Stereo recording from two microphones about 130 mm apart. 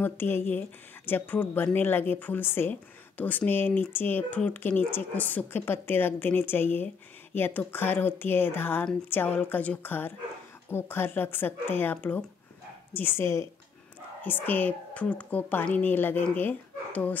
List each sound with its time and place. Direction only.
0.0 s a woman's voice: 15° left (ahead or behind)